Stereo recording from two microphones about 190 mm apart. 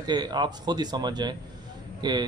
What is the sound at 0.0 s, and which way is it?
Speech, 20° right (ahead or behind).